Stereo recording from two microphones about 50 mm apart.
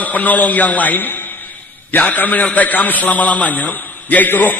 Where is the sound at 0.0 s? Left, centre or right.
Left.